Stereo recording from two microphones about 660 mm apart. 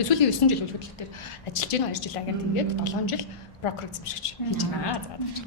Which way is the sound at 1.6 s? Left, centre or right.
Left.